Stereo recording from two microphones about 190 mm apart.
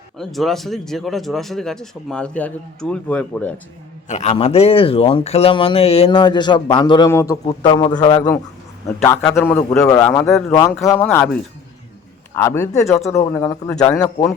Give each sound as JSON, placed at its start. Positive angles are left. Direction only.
{"t": 0.2, "sound": "speech", "side_deg": 0}
{"t": 4.1, "sound": "a man's voice", "side_deg": 35}
{"t": 12.3, "sound": "a man's voice", "side_deg": 15}